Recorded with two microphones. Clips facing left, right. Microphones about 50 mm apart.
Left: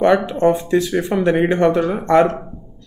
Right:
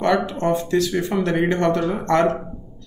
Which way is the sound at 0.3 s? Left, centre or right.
Centre.